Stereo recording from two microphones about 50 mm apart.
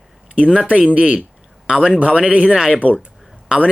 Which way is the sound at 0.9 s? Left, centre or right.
Right.